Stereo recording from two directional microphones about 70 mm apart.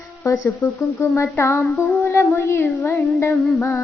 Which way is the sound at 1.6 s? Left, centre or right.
Left.